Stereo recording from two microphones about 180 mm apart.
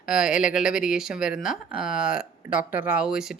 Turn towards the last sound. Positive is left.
turn(degrees=-5)  # may be behind; listen again after turning